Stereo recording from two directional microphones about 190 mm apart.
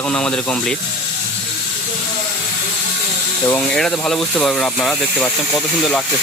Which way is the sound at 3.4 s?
5° left (ahead or behind).